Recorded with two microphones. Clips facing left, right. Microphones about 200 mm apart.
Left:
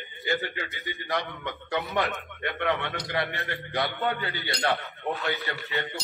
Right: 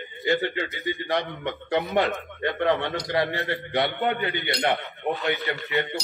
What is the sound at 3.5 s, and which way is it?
A man's voice, 20° right (ahead or behind).